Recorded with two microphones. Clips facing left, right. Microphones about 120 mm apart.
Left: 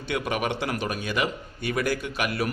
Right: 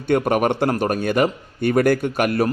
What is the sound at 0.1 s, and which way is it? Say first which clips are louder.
A man's voice: right 10 dB; 50° right (ahead or behind).